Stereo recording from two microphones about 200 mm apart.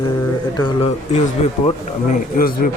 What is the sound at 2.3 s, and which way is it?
Speech, 45° left (ahead or behind).